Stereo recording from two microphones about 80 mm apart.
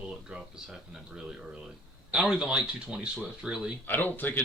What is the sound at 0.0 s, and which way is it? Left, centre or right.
Speech, centre.